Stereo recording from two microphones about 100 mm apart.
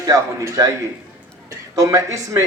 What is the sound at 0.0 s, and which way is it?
Speech, 35° right (ahead or behind).